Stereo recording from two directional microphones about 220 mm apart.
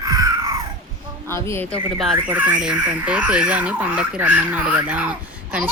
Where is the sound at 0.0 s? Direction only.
15° right (ahead or behind).